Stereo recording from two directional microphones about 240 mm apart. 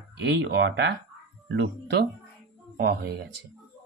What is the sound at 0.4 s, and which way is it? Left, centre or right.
Speech, right.